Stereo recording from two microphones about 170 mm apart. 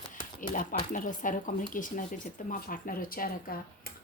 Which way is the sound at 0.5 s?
50° left (ahead or behind).